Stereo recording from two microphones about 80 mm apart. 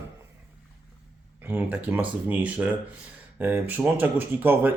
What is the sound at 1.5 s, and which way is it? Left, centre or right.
Speech, right.